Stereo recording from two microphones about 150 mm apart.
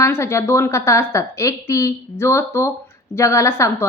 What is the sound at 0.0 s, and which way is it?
A woman's voice, 20° left (ahead or behind).